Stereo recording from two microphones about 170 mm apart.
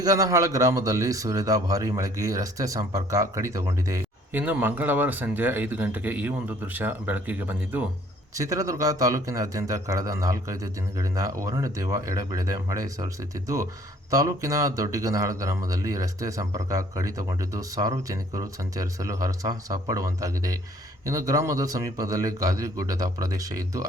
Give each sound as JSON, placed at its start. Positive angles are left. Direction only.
{"t": 0.0, "sound": "speech", "side_deg": -20}
{"t": 14.1, "sound": "speech", "side_deg": -20}